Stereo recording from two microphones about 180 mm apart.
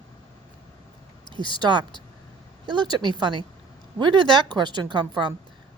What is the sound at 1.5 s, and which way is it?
Speech, 25° right (ahead or behind).